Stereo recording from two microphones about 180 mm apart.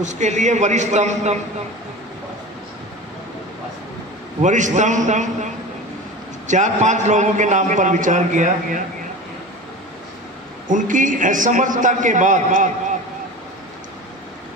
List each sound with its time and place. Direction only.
0.0 s a man's voice: 40° right (ahead or behind)
4.4 s a man's voice: 40° right (ahead or behind)
10.7 s a man's voice: 45° right (ahead or behind)